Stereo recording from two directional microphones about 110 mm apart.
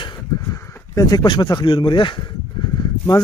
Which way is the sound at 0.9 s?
35° left (ahead or behind).